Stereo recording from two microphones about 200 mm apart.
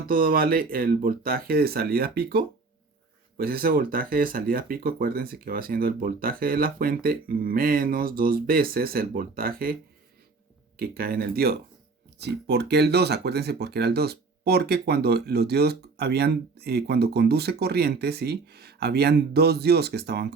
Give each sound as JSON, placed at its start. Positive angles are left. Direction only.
{"t": 0.1, "sound": "speech", "side_deg": -45}
{"t": 10.8, "sound": "speech", "side_deg": -50}